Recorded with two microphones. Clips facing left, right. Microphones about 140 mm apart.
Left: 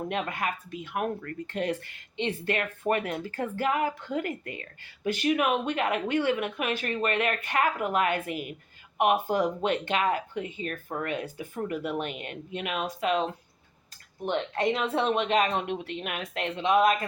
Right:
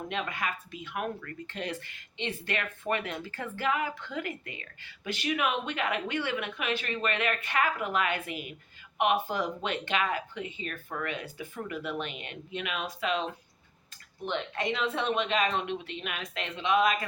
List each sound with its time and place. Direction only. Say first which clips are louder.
0.1 s speech: left 3 dB; 50° left (ahead or behind)
14.3 s speech: left 5 dB; 50° left (ahead or behind)